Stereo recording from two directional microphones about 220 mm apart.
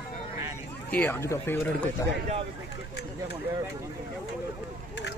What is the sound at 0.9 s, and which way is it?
Speech, 10° left (ahead or behind).